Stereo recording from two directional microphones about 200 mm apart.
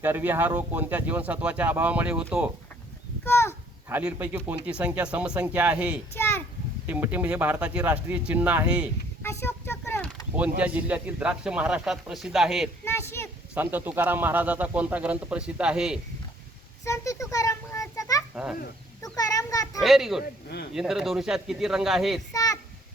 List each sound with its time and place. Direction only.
0.0 s speech: 10° right (ahead or behind)
3.2 s speech: 15° left (ahead or behind)
3.8 s speech: 10° right (ahead or behind)
6.1 s a child's voice: 10° left (ahead or behind)
6.8 s speech: 10° right (ahead or behind)
9.2 s a sound: 15° left (ahead or behind)
10.6 s speech: 5° right (ahead or behind)
12.8 s a sound: 15° left (ahead or behind)
13.5 s speech: 10° right (ahead or behind)
16.8 s a sound: 15° left (ahead or behind)
19.0 s children playing: 20° left (ahead or behind)
19.8 s speech: centre (ahead or behind)
22.3 s a sound: 15° left (ahead or behind)